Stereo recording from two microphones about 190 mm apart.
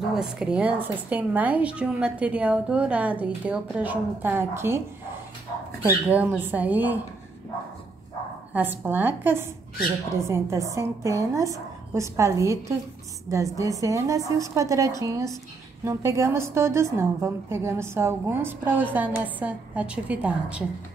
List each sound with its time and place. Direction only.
0.1 s a woman's voice: 5° right (ahead or behind)
8.5 s a woman's voice: 10° right (ahead or behind)